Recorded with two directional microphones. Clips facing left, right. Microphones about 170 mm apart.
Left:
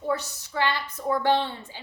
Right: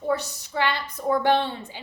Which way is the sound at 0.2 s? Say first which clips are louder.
Right 1 dB; 15° right (ahead or behind).